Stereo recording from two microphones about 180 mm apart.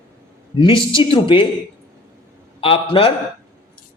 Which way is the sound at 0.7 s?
25° left (ahead or behind).